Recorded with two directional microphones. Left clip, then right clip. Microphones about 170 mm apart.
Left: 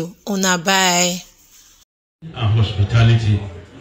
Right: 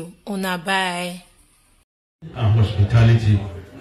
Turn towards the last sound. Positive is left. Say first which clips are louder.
# left 1 dB
turn(degrees=0)  # may be behind; listen again after turning